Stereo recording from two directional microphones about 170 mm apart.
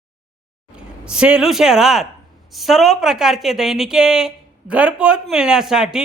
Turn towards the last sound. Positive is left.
turn(degrees=-5)  # may be behind; listen again after turning